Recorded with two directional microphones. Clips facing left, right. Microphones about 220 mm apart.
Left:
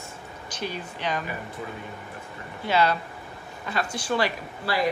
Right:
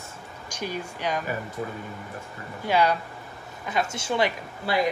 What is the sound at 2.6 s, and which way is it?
Speech, 10° right (ahead or behind).